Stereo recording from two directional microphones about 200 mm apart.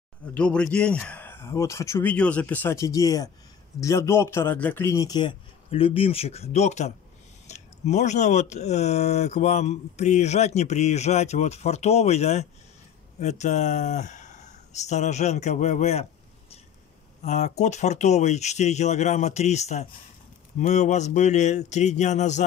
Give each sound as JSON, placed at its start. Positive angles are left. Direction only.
{"t": 0.3, "sound": "a man's voice", "side_deg": 5}